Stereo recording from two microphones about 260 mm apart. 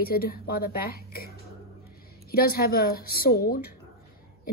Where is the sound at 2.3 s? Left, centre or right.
Left.